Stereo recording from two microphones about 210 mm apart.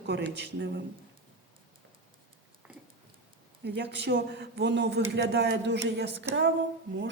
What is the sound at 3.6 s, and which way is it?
A woman's voice, 55° right (ahead or behind).